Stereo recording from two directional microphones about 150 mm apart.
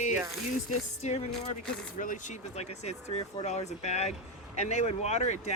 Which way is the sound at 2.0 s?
60° left (ahead or behind).